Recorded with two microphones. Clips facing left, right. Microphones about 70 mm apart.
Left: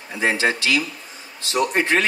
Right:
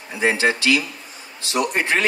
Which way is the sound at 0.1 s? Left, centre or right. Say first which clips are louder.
Right 1 dB; right.